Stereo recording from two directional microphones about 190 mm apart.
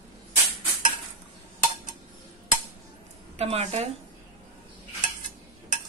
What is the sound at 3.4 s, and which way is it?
Speech, 35° right (ahead or behind).